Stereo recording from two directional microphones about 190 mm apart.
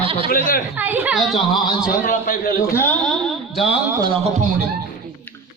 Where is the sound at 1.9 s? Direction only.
45° left (ahead or behind).